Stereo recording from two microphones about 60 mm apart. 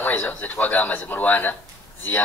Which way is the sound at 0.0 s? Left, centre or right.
Left.